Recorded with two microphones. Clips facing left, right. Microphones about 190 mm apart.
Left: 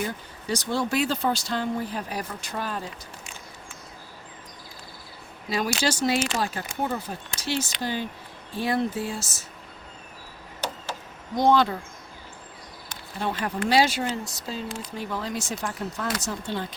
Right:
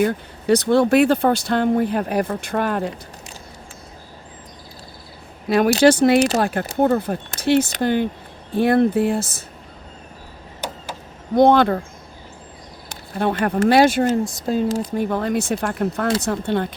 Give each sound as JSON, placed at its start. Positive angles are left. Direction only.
{"t": 0.0, "sound": "speech", "side_deg": -60}
{"t": 5.5, "sound": "speech", "side_deg": -60}
{"t": 11.3, "sound": "speech", "side_deg": -60}
{"t": 13.1, "sound": "speech", "side_deg": -55}